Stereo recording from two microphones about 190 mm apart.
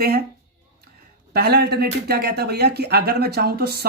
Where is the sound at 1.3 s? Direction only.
55° right (ahead or behind).